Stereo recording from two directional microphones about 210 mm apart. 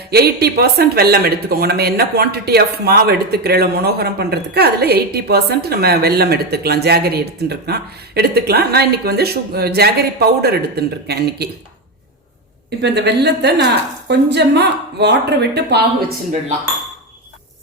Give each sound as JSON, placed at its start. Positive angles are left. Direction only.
{"t": 0.1, "sound": "speech", "side_deg": -50}
{"t": 12.8, "sound": "speech", "side_deg": -55}